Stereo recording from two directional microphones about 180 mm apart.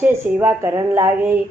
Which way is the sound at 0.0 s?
10° right (ahead or behind).